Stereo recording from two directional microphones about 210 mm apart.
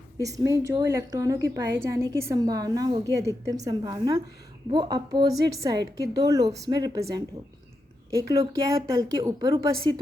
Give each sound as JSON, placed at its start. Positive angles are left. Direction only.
{"t": 0.2, "sound": "a woman's voice", "side_deg": -15}